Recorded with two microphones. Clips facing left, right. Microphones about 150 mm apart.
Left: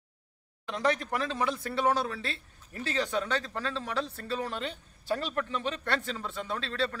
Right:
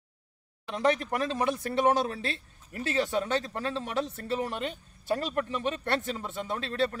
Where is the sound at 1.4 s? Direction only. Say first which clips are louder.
Right 3 dB; 20° right (ahead or behind).